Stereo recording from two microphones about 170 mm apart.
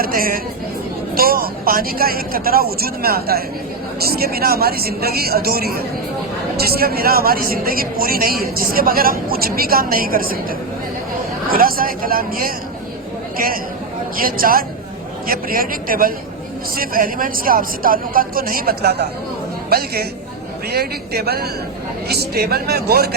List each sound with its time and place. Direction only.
0.0 s speech: 55° right (ahead or behind)
11.4 s a man's voice: 60° right (ahead or behind)